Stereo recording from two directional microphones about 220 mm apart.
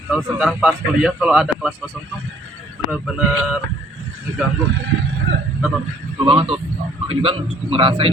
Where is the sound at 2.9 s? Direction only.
5° right (ahead or behind).